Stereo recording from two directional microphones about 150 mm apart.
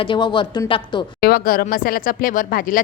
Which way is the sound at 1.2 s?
80° left.